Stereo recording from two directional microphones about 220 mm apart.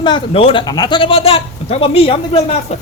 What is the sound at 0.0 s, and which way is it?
Speech, 25° left (ahead or behind).